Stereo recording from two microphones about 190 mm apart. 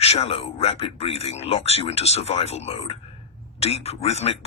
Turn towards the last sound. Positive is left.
turn(degrees=35)  # may be behind; listen again after turning